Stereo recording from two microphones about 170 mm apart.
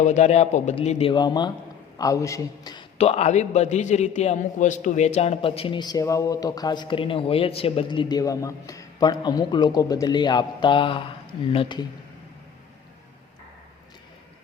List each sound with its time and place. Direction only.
0.0 s a man's voice: 45° left (ahead or behind); by 2.8 s 20° left (ahead or behind)
3.0 s a man's voice: 35° left (ahead or behind)